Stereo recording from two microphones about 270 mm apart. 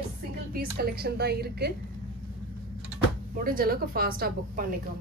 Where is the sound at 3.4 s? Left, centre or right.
Right.